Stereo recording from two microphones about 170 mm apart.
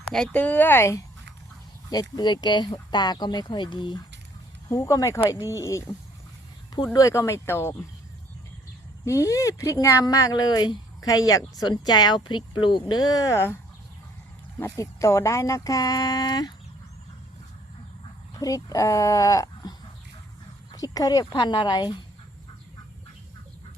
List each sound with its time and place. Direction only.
0.1 s speech: 5° left (ahead or behind)
9.0 s speech: 20° left (ahead or behind)
14.6 s speech: 15° left (ahead or behind)
18.3 s speech: 20° left (ahead or behind)
20.7 s speech: 20° left (ahead or behind)